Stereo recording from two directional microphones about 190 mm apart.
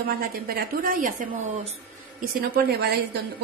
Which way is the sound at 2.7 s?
55° right (ahead or behind).